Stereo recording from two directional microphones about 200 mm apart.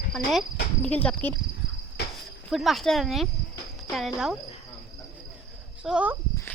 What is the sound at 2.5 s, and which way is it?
Speech, centre (ahead or behind).